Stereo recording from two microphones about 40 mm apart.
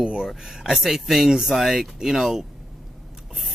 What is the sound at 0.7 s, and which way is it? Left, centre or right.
Speech, centre.